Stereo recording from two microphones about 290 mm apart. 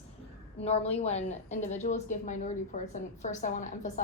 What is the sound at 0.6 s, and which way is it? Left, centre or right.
A woman's voice, left.